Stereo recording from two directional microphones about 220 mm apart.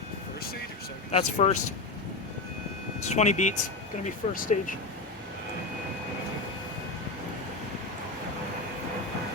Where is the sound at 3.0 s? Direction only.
30° left (ahead or behind).